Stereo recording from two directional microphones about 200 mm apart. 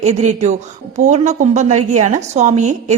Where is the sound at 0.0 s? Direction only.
35° right (ahead or behind).